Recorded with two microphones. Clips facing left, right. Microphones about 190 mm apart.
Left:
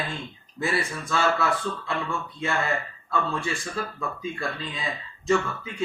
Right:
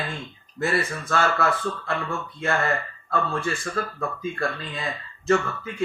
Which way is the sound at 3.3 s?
50° right (ahead or behind).